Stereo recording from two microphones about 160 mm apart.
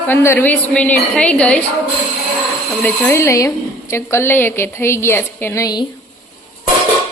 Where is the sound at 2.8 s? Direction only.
15° left (ahead or behind).